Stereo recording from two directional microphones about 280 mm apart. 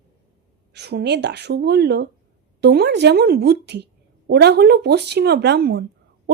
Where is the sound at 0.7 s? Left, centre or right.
Right.